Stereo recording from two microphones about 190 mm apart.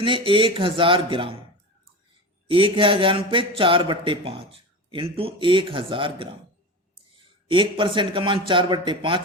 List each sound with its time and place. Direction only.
0.0 s a man's voice: 25° right (ahead or behind)
2.5 s a man's voice: 25° right (ahead or behind)